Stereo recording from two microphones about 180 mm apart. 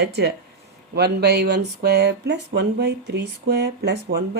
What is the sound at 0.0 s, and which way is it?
Speech, 70° right (ahead or behind).